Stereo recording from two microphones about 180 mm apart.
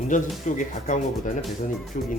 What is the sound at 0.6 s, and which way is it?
Speech, 45° left (ahead or behind).